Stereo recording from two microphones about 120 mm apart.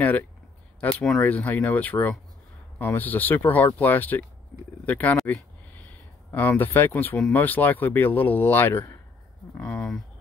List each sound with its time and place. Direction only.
0.0 s speech: 15° left (ahead or behind)
6.3 s speech: 15° left (ahead or behind)
9.6 s speech: 10° left (ahead or behind)